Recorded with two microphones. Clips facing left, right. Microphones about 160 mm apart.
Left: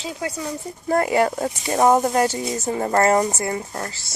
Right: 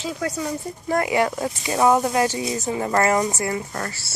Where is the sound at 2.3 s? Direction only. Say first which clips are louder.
Even; 15° right (ahead or behind).